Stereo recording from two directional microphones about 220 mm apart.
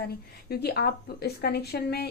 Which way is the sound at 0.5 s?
45° left (ahead or behind).